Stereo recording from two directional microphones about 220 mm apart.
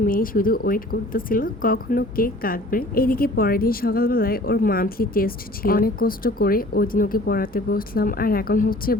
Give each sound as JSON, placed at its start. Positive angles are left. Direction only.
{"t": 0.0, "sound": "speech", "side_deg": 40}